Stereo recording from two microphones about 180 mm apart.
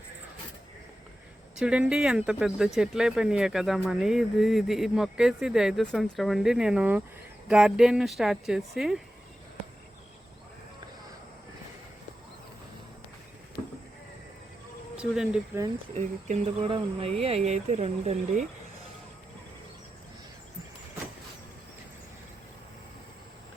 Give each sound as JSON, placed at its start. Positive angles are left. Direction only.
{"t": 1.5, "sound": "speech", "side_deg": -5}
{"t": 14.9, "sound": "speech", "side_deg": -5}
{"t": 16.0, "sound": "speech", "side_deg": -35}